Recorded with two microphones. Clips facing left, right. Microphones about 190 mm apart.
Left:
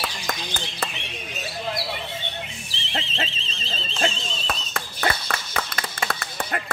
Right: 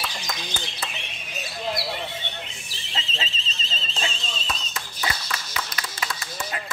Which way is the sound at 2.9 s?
60° left (ahead or behind).